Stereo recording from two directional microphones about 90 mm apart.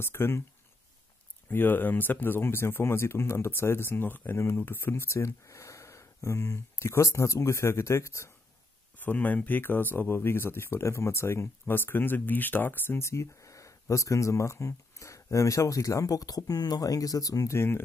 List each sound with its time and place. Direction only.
0.0 s speech: 25° left (ahead or behind)
1.5 s speech: 25° left (ahead or behind)
9.0 s speech: 20° left (ahead or behind); by 17.6 s 40° left (ahead or behind)
17.6 s speech: 25° left (ahead or behind)